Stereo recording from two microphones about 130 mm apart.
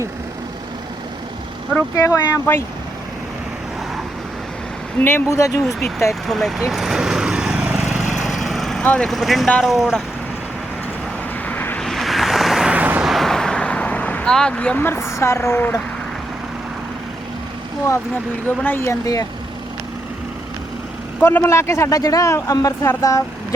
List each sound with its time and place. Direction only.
2.0 s speech: 25° left (ahead or behind)
4.9 s speech: 15° left (ahead or behind)
6.2 s vehicle: centre (ahead or behind)
11.4 s vehicle: 15° left (ahead or behind)
11.9 s vehicle: centre (ahead or behind)
13.1 s vehicle: centre (ahead or behind); by 15.8 s 15° left (ahead or behind)
18.4 s speech: 15° left (ahead or behind)
21.2 s speech: 20° left (ahead or behind)